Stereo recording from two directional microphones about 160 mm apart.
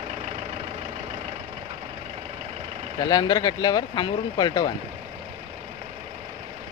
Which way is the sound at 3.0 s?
25° left (ahead or behind).